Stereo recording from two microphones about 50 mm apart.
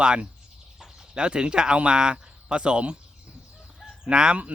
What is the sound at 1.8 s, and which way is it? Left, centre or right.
Speech, centre.